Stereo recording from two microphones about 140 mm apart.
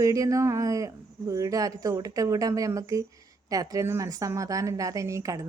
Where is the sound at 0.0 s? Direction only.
25° right (ahead or behind).